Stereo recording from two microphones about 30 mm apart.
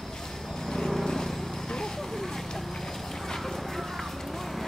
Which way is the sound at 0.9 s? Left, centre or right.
Centre.